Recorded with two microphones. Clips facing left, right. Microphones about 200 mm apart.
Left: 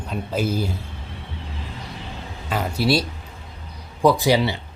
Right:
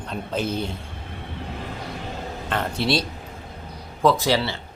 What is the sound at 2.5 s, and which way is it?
Speech, 5° left (ahead or behind).